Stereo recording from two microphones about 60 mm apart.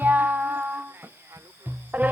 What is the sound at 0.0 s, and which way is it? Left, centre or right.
Music, right.